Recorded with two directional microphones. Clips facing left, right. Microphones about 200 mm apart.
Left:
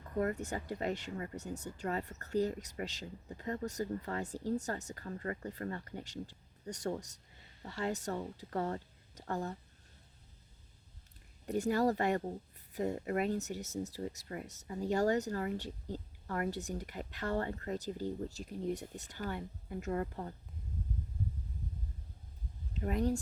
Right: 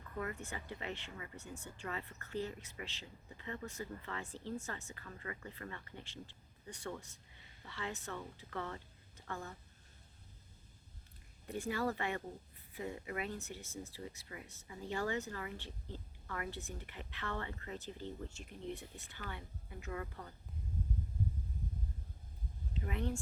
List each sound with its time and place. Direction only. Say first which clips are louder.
0.2 s speech: left 8 dB; 40° left (ahead or behind)
11.4 s speech: left 7 dB; 40° left (ahead or behind)
22.8 s speech: left 7 dB; 40° left (ahead or behind)